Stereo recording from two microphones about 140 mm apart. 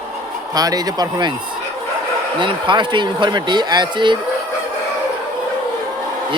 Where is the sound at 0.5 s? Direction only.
25° right (ahead or behind).